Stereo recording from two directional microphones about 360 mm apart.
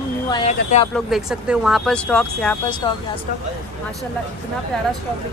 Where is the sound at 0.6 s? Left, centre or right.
Centre.